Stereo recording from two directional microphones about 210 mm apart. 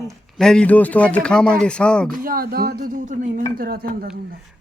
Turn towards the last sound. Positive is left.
turn(degrees=-45)  # may be behind; listen again after turning